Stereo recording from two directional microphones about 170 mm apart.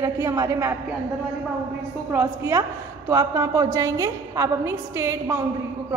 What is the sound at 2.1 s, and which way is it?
A woman's voice, 15° right (ahead or behind).